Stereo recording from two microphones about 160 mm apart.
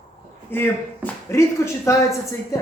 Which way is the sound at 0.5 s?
15° left (ahead or behind).